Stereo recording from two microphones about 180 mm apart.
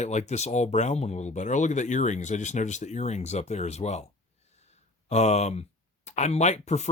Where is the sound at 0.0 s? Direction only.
40° left (ahead or behind).